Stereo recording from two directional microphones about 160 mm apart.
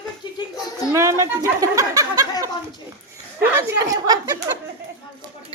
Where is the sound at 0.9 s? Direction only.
20° right (ahead or behind).